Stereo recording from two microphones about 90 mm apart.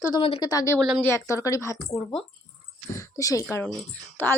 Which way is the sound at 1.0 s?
35° left (ahead or behind).